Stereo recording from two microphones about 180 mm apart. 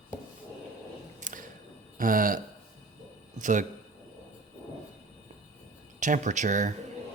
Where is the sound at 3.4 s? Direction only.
45° right (ahead or behind).